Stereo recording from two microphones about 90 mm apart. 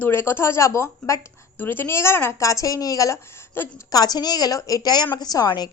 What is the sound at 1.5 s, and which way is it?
A woman's voice, 20° left (ahead or behind).